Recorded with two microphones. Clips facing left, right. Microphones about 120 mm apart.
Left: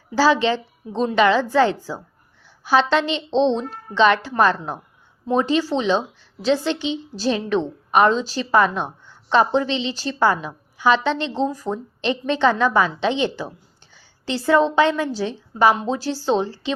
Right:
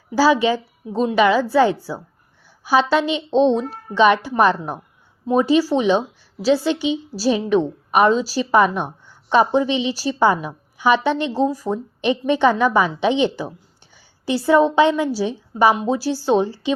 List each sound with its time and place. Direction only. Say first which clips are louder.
0.1 s a woman's voice: right 1 dB; 10° right (ahead or behind)